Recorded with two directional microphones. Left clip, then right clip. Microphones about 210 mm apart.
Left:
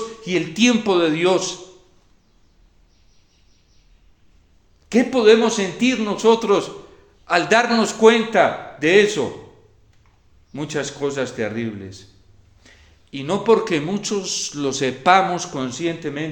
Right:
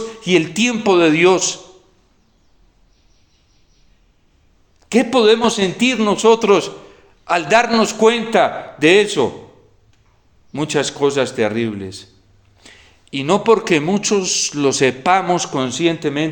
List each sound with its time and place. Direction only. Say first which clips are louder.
0.2 s a man's voice: right 4 dB; 35° right (ahead or behind)
4.9 s a man's voice: right 1 dB; 35° right (ahead or behind)
10.5 s a man's voice: right 7 dB; 35° right (ahead or behind)